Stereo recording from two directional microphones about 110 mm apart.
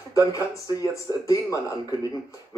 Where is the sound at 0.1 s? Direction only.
30° left (ahead or behind).